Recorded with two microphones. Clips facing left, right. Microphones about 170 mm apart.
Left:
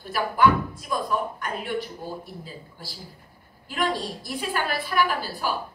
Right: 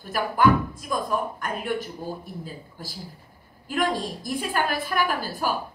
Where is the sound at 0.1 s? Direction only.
45° right (ahead or behind).